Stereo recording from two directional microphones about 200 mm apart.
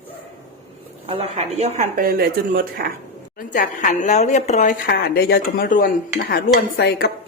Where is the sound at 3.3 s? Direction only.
40° left (ahead or behind).